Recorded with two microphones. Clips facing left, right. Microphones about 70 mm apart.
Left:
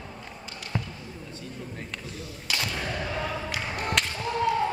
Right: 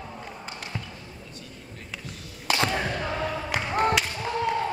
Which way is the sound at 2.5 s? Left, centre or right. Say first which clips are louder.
Right 6 dB; right.